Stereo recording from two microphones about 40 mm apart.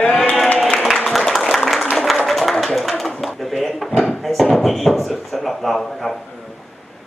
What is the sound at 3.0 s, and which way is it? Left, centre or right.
Drawer open or close, centre.